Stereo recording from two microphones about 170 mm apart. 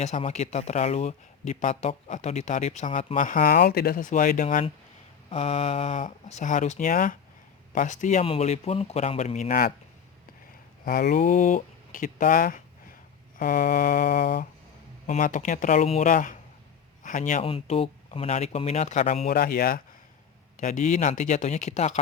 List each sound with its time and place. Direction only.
0.0 s speech: 40° left (ahead or behind)
5.3 s speech: 35° left (ahead or behind)
10.8 s speech: 60° left (ahead or behind)
13.4 s mantra: 55° left (ahead or behind)
15.0 s a man's voice: 50° left (ahead or behind)
17.4 s speech: 35° left (ahead or behind)
19.3 s mantra: 60° left (ahead or behind)
20.6 s speech: 45° left (ahead or behind)